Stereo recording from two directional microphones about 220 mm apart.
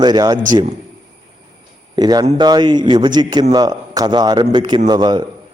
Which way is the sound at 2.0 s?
15° right (ahead or behind).